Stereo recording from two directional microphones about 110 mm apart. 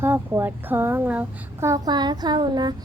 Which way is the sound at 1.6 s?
35° right (ahead or behind).